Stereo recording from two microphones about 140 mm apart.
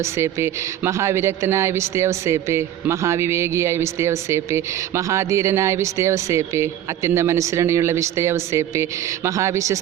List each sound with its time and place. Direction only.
0.0 s a man's voice: 20° right (ahead or behind)